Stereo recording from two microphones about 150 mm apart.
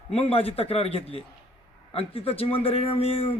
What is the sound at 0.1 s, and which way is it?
A man's voice, 40° left (ahead or behind).